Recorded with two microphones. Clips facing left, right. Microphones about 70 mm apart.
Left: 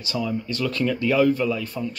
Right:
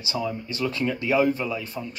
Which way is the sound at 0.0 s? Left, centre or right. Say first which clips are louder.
Left 2 dB; centre.